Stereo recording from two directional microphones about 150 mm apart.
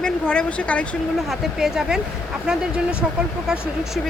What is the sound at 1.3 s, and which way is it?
A woman's voice, centre (ahead or behind).